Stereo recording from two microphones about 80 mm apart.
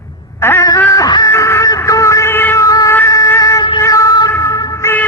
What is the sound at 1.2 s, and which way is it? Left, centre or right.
Cat, left.